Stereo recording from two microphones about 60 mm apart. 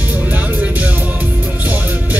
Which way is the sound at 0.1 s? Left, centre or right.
Right.